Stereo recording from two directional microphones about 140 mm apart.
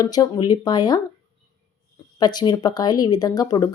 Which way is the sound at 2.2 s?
30° left (ahead or behind).